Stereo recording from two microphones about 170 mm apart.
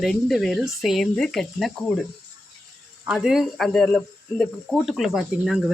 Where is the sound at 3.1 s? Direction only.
Centre (ahead or behind).